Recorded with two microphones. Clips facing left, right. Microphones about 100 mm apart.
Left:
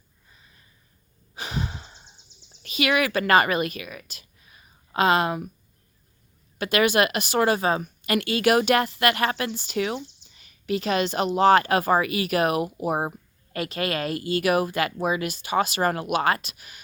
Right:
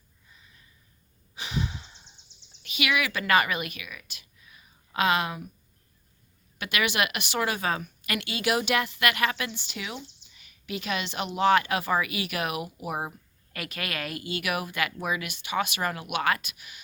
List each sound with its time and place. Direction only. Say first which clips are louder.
1.4 s a sound: left 1 dB; 45° left (ahead or behind)
2.6 s a woman's voice: left 5 dB; 40° left (ahead or behind)
6.6 s a woman's voice: left 7 dB; 35° left (ahead or behind)